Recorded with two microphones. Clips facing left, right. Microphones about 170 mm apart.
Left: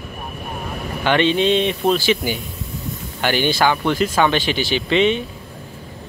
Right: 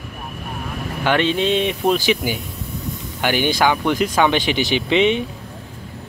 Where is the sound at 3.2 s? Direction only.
10° right (ahead or behind).